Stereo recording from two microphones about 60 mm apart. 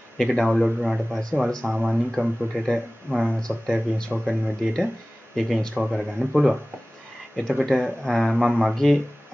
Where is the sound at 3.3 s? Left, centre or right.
Centre.